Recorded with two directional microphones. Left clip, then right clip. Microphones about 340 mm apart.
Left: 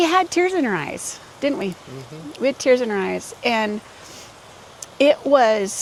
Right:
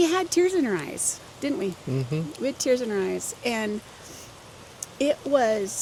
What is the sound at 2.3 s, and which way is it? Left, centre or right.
Speech, left.